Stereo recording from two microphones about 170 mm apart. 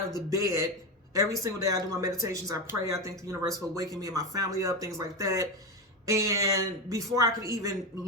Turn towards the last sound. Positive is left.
turn(degrees=-20)  # may be behind; listen again after turning